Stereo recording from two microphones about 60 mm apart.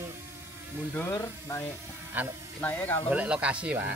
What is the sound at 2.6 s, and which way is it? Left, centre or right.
Speech, left.